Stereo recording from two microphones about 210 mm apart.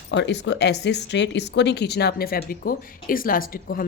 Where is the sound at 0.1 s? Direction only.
55° left (ahead or behind).